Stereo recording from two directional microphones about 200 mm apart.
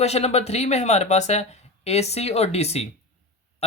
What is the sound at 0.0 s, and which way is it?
Speech, 30° left (ahead or behind).